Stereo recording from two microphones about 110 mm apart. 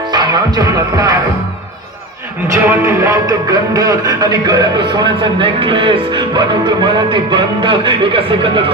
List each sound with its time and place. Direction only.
0.1 s music: 35° right (ahead or behind)
2.5 s a man's voice: 25° right (ahead or behind); by 8.6 s 50° right (ahead or behind)